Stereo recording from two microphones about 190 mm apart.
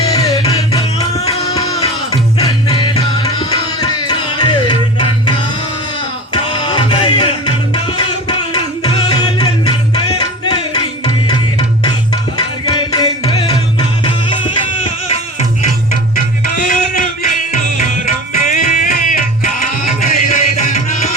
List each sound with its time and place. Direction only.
0.1 s music: 20° left (ahead or behind)
1.6 s music: 35° left (ahead or behind)
2.6 s tabla: 20° left (ahead or behind)
6.3 s music: 25° left (ahead or behind)
16.6 s music: 40° left (ahead or behind)